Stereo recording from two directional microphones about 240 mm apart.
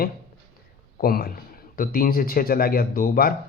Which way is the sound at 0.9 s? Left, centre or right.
Left.